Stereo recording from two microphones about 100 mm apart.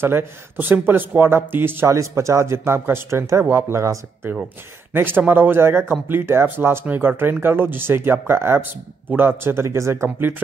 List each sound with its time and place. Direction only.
0.0 s speech: 25° right (ahead or behind)